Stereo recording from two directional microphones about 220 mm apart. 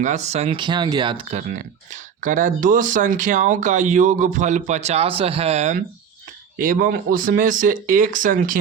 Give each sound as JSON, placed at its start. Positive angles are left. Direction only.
{"t": 0.0, "sound": "speech", "side_deg": -30}